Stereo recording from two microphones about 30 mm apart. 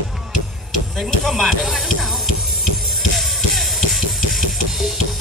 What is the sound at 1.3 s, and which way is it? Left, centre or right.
Music, centre.